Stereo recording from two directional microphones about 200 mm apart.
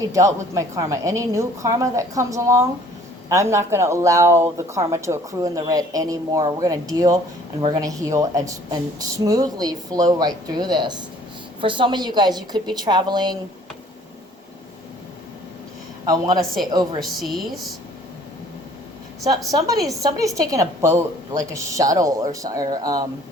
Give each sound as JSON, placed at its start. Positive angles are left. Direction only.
{"t": 0.0, "sound": "speech", "side_deg": -15}
{"t": 16.0, "sound": "speech", "side_deg": -20}
{"t": 17.0, "sound": "speech", "side_deg": 0}
{"t": 19.5, "sound": "speech", "side_deg": -15}